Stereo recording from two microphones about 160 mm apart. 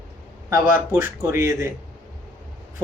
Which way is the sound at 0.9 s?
15° right (ahead or behind).